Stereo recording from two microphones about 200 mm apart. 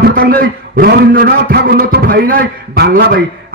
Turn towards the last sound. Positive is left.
turn(degrees=-50)  # may be behind; listen again after turning